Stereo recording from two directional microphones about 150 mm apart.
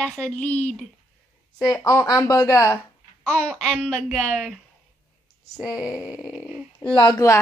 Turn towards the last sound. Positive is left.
turn(degrees=25)  # may be behind; listen again after turning